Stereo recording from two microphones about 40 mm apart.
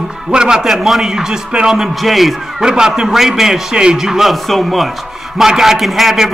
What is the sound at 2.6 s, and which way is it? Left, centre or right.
A man's voice, centre.